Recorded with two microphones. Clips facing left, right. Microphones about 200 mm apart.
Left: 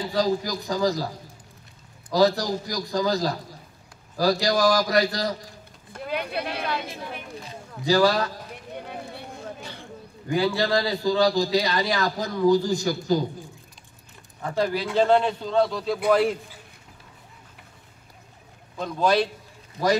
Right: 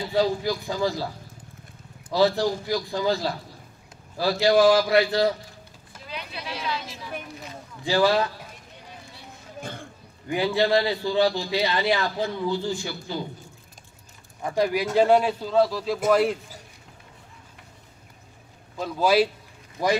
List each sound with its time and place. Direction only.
0.1 s a man's voice: 40° left (ahead or behind)
2.1 s a man's voice: 40° left (ahead or behind)
5.9 s speech: 55° left (ahead or behind)
7.8 s a man's voice: 40° left (ahead or behind)
8.7 s run: 60° left (ahead or behind)
9.6 s a sound: 50° right (ahead or behind)
10.3 s speech: 20° right (ahead or behind)
10.9 s a man's voice: 40° left (ahead or behind)
14.4 s a man's voice: 15° right (ahead or behind)
18.8 s speech: 5° right (ahead or behind)